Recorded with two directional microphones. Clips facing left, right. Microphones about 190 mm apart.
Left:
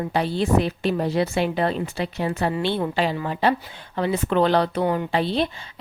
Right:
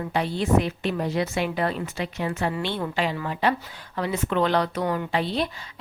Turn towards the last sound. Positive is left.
turn(degrees=30)  # may be behind; listen again after turning